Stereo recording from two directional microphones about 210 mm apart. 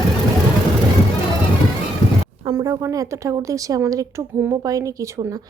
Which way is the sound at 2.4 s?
15° right (ahead or behind).